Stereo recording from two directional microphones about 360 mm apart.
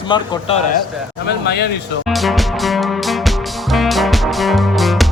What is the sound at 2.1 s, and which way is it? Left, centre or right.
Music, centre.